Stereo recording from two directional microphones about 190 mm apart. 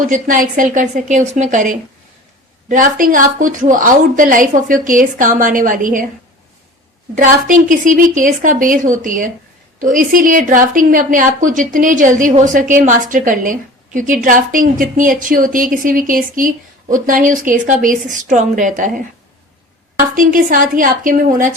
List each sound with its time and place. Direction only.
0.0 s a woman's voice: 45° right (ahead or behind)
7.2 s a woman's voice: 45° right (ahead or behind)
20.1 s a woman's voice: 45° right (ahead or behind)